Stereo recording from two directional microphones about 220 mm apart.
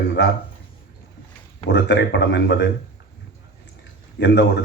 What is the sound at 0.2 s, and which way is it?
Speech, 50° left (ahead or behind).